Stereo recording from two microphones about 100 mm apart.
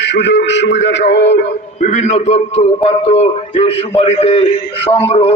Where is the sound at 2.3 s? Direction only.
90° left.